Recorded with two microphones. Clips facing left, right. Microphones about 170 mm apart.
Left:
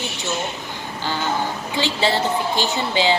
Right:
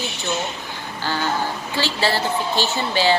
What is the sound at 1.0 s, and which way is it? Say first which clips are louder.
A woman's voice: even; 15° left (ahead or behind).